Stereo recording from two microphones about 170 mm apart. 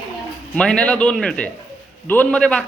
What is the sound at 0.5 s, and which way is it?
A man's voice, 5° left (ahead or behind).